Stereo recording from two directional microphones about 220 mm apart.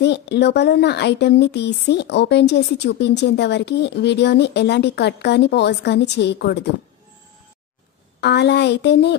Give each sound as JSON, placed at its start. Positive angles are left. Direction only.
{"t": 0.0, "sound": "speech", "side_deg": 50}
{"t": 8.2, "sound": "speech", "side_deg": 50}